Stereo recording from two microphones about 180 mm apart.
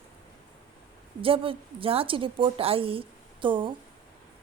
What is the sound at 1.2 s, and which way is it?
A woman's voice, 30° right (ahead or behind).